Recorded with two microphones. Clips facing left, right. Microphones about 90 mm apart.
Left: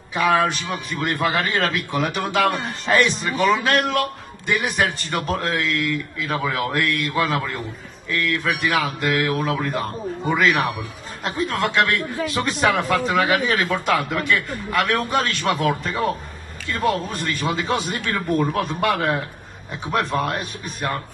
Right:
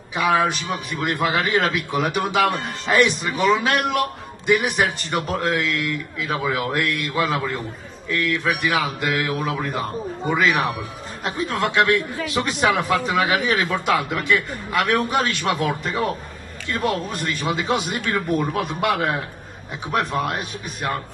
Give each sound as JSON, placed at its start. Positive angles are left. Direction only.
{"t": 0.1, "sound": "a man's voice", "side_deg": -10}
{"t": 16.8, "sound": "a man's voice", "side_deg": -15}